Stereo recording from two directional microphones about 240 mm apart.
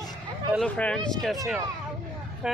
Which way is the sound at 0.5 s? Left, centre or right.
Centre.